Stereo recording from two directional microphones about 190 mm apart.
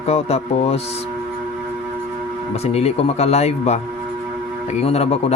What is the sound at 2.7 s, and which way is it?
A man's voice, 35° left (ahead or behind).